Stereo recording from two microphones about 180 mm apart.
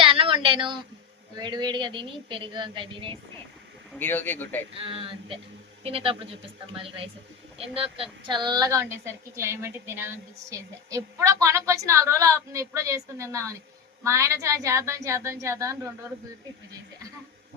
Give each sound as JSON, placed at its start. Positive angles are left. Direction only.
{"t": 0.0, "sound": "a sound", "side_deg": -30}
{"t": 1.4, "sound": "a woman's voice", "side_deg": -25}
{"t": 3.9, "sound": "speech", "side_deg": 10}
{"t": 4.7, "sound": "a woman's voice", "side_deg": -30}